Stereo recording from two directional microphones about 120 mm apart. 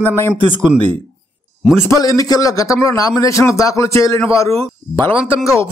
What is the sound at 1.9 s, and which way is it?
Speech, 30° left (ahead or behind).